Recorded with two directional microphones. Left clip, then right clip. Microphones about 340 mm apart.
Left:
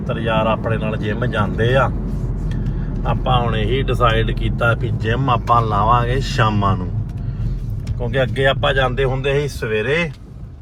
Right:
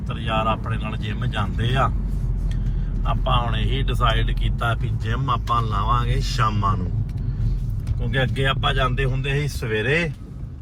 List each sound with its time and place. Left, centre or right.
0.1 s speech: centre
3.1 s speech: centre
8.7 s speech: centre